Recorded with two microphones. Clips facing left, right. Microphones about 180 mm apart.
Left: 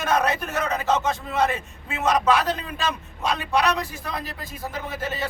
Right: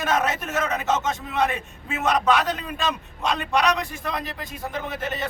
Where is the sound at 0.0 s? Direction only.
Centre (ahead or behind).